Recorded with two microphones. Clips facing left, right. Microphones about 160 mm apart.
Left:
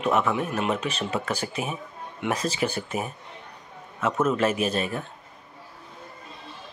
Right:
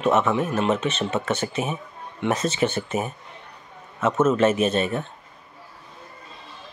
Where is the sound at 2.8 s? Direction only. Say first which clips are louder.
Right 4 dB; centre (ahead or behind).